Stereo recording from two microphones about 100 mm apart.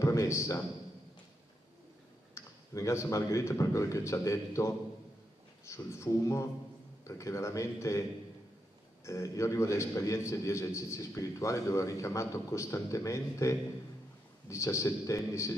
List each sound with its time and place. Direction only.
0.0 s a man's voice: 35° left (ahead or behind)
2.3 s a man's voice: 30° left (ahead or behind)
9.0 s a man's voice: 30° left (ahead or behind)